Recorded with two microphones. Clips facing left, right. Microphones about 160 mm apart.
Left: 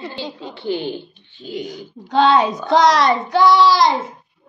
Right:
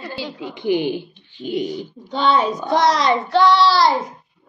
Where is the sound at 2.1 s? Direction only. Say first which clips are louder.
Left 4 dB; 80° left.